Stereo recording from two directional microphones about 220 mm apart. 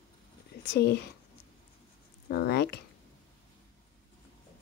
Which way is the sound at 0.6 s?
50° left (ahead or behind).